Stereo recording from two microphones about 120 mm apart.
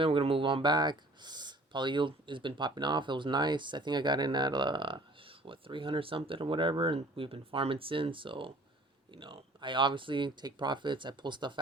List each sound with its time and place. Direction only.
0.0 s speech: 50° right (ahead or behind)